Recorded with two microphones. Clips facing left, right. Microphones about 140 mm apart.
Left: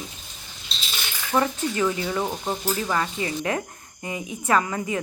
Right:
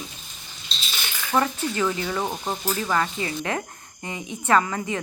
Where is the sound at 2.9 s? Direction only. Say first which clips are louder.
Right 1 dB; 25° left (ahead or behind).